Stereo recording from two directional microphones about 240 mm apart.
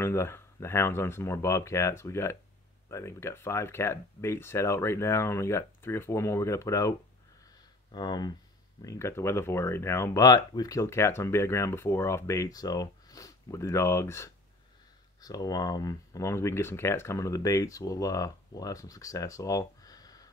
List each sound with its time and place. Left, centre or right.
0.0 s speech: centre